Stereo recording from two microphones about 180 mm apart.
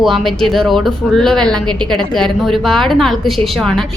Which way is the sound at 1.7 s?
25° right (ahead or behind).